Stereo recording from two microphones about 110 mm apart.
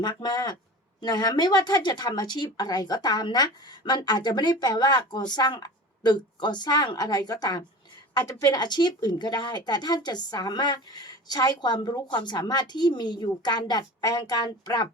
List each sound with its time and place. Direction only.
0.0 s speech: 40° left (ahead or behind)